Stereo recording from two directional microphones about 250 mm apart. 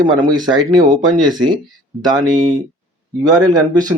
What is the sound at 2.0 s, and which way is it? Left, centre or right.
Speech, centre.